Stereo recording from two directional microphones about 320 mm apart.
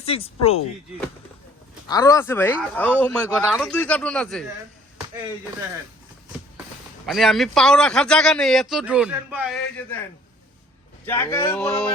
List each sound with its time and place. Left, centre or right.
0.0 s speech: centre
1.9 s speech: centre
7.0 s speech: centre
11.0 s speech: centre